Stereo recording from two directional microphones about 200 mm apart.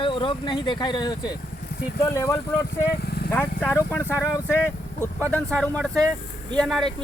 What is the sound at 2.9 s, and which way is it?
Lawn mower, 50° left (ahead or behind).